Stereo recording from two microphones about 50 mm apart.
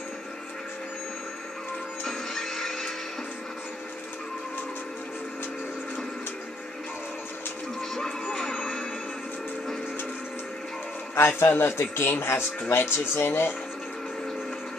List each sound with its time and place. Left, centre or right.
2.0 s music: centre
11.1 s speech: left